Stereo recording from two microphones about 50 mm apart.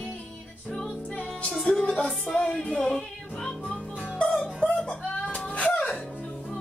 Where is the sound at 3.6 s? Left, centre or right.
Left.